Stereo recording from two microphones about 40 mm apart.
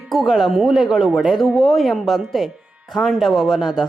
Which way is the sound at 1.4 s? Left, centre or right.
Centre.